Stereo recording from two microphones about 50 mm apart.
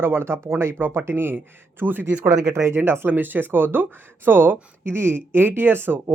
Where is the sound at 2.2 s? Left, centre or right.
Right.